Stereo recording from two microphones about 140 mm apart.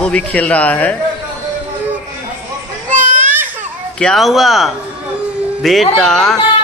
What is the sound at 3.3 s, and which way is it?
Baby cry, 15° right (ahead or behind).